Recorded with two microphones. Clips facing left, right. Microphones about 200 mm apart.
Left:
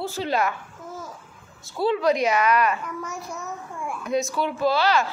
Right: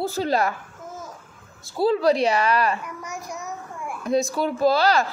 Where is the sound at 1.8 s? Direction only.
35° right (ahead or behind).